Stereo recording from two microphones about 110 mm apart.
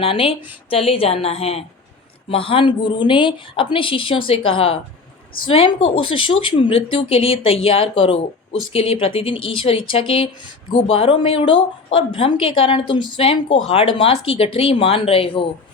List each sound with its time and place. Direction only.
0.0 s a woman's voice: 55° left (ahead or behind)
2.3 s a woman's voice: 55° left (ahead or behind)